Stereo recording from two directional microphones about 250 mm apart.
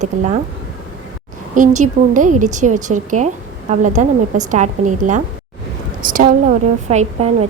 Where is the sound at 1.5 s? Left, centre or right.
Right.